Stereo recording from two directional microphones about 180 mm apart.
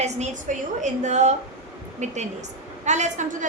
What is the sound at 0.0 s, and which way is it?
A woman's voice, 40° right (ahead or behind).